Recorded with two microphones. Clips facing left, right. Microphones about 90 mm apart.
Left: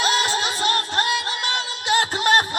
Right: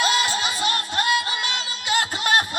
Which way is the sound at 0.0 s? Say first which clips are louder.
Left 1 dB; 35° left (ahead or behind).